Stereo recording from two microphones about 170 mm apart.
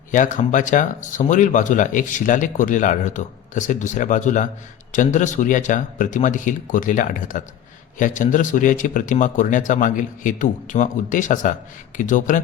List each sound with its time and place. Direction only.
0.1 s speech: 50° left (ahead or behind)